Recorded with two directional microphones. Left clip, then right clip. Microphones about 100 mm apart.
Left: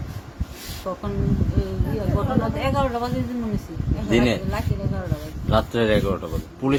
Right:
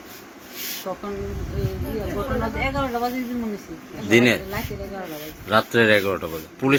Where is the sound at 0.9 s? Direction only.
25° left (ahead or behind).